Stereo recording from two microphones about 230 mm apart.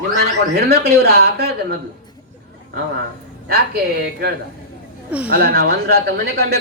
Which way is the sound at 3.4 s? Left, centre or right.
Right.